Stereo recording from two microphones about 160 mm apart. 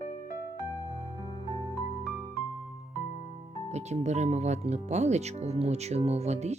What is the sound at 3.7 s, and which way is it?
Speech, 45° right (ahead or behind).